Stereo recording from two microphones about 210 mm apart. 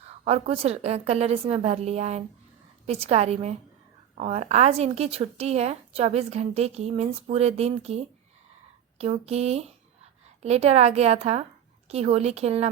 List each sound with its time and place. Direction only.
0.3 s a woman's voice: 30° right (ahead or behind)